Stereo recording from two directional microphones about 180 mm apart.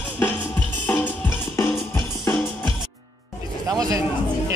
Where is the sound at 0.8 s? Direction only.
10° left (ahead or behind).